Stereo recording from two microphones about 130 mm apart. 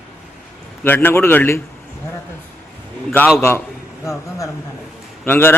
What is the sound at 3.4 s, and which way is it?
Speech, 20° left (ahead or behind).